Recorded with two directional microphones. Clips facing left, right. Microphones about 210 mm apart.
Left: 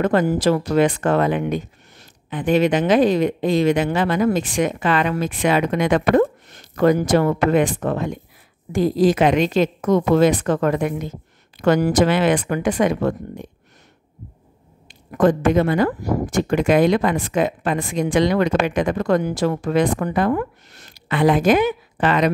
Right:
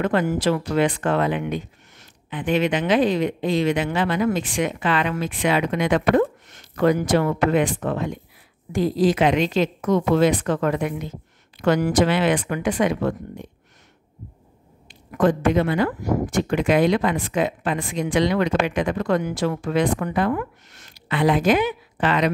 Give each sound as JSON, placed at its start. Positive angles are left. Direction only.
{"t": 0.0, "sound": "speech", "side_deg": 40}
{"t": 14.9, "sound": "speech", "side_deg": 45}